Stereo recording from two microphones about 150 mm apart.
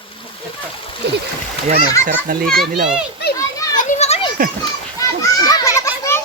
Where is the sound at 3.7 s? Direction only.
50° left (ahead or behind).